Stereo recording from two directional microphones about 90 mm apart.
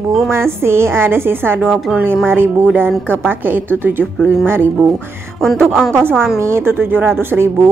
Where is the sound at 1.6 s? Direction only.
5° left (ahead or behind).